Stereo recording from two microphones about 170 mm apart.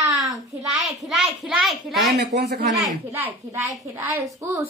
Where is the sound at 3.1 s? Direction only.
10° right (ahead or behind).